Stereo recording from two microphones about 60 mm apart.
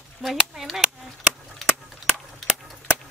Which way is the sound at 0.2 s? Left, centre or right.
Centre.